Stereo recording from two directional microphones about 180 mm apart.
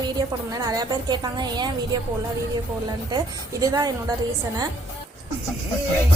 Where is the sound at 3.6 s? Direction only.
20° right (ahead or behind).